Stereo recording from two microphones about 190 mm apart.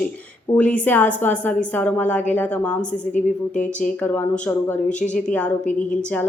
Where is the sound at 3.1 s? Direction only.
40° left (ahead or behind).